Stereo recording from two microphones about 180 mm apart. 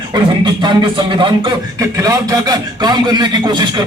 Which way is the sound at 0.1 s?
25° right (ahead or behind).